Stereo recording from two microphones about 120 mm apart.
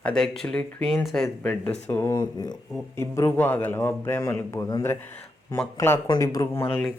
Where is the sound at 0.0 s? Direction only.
5° left (ahead or behind).